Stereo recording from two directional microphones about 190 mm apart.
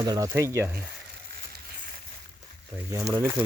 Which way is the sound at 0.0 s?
20° right (ahead or behind).